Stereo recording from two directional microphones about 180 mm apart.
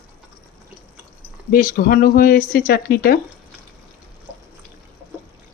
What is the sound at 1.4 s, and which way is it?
Speech, 50° left (ahead or behind).